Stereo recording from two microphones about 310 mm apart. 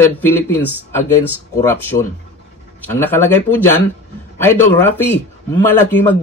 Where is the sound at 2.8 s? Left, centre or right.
Centre.